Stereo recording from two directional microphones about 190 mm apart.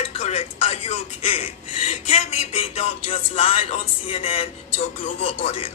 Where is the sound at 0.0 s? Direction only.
30° left (ahead or behind).